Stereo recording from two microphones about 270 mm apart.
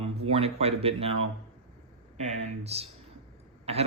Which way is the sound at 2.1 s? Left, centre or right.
Right.